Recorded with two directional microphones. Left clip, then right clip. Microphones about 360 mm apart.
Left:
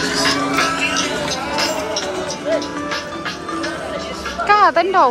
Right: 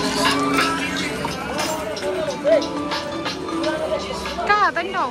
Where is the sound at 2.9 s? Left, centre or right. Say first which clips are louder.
Left 1 dB; centre.